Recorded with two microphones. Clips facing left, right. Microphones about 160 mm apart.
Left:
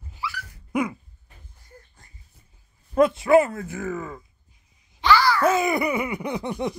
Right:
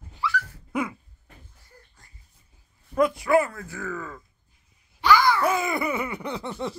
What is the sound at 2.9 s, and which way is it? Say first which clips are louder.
Speech: left 4 dB; 25° left (ahead or behind).